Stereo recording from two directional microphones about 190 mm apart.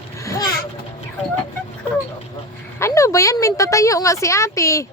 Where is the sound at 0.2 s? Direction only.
15° left (ahead or behind).